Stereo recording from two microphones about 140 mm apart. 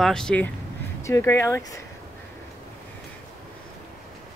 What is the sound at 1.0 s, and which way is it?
Speech, 20° left (ahead or behind).